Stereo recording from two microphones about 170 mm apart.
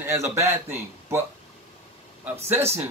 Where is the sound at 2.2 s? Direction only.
10° right (ahead or behind).